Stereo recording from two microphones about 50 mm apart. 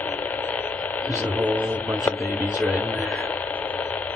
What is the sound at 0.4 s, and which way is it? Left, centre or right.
Radio, left.